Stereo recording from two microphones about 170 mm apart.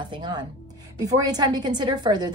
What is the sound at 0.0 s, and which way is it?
Speech, 25° right (ahead or behind).